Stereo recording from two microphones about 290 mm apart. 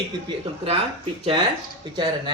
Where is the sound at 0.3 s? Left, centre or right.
Centre.